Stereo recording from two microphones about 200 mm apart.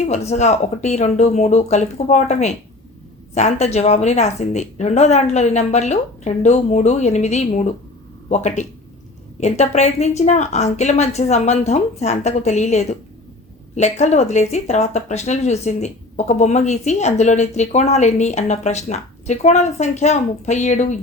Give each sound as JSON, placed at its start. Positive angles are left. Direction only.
{"t": 0.0, "sound": "speech", "side_deg": 35}